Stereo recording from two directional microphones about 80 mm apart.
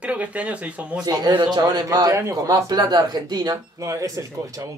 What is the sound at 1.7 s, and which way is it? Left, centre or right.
Speech, right.